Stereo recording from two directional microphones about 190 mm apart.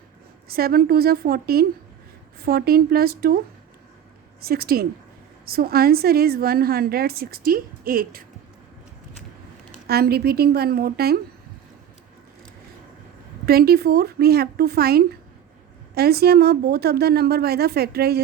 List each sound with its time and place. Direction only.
0.4 s a woman's voice: 55° right (ahead or behind)
9.8 s a woman's voice: 55° right (ahead or behind)
13.4 s a woman's voice: 55° right (ahead or behind)